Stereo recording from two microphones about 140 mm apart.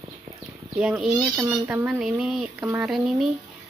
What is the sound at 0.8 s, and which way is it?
Speech, 5° right (ahead or behind).